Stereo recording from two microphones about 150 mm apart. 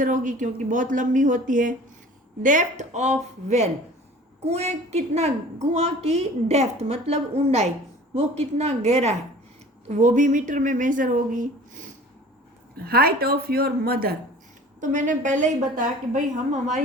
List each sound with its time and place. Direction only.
0.0 s a woman's voice: 60° right (ahead or behind)
4.4 s a woman's voice: 45° right (ahead or behind)
12.7 s speech: 90° right
14.8 s a woman's voice: 55° right (ahead or behind)